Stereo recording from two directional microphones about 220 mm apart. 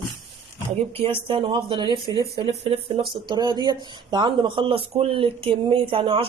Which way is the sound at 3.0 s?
Centre (ahead or behind).